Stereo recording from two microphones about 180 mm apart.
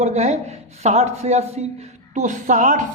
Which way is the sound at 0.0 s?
40° right (ahead or behind).